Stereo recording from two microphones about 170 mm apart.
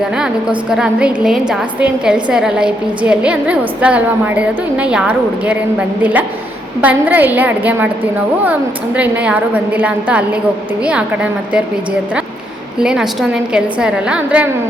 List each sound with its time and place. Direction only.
0.7 s a woman's voice: 5° right (ahead or behind)
9.0 s a woman's voice: 10° right (ahead or behind)
12.8 s a woman's voice: 5° right (ahead or behind)